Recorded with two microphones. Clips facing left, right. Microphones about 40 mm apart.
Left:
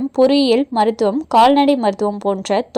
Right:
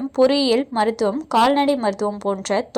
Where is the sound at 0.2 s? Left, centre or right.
Centre.